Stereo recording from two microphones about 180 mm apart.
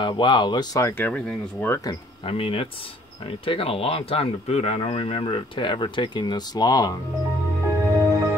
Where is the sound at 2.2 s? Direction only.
30° left (ahead or behind).